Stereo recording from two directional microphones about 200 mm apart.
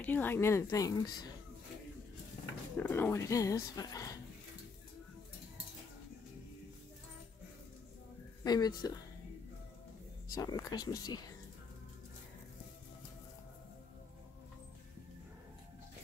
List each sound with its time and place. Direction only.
0.0 s speech: 10° left (ahead or behind)
2.8 s speech: 10° left (ahead or behind)
8.5 s speech: 20° left (ahead or behind)
10.3 s speech: 15° left (ahead or behind)